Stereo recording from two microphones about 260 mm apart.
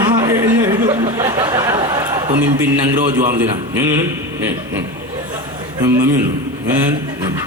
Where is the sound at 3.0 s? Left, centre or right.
Right.